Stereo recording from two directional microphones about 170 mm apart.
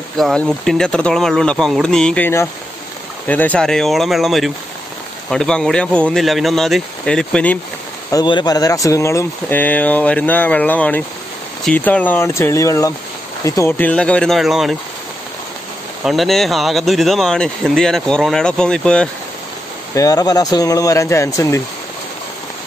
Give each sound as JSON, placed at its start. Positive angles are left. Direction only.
{"t": 0.2, "sound": "speech", "side_deg": 5}
{"t": 8.1, "sound": "speech", "side_deg": 25}
{"t": 16.0, "sound": "speech", "side_deg": 0}
{"t": 19.9, "sound": "speech", "side_deg": 20}